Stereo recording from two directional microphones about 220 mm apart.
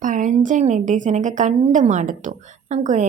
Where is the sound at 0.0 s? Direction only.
35° right (ahead or behind).